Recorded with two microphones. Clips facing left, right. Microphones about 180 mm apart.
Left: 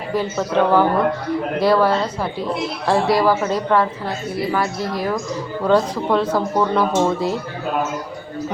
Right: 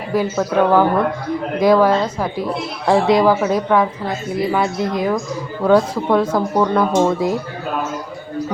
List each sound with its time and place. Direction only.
0.1 s a woman's voice: 10° right (ahead or behind)